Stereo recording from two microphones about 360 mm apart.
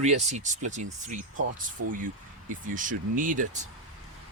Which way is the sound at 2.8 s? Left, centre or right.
Right.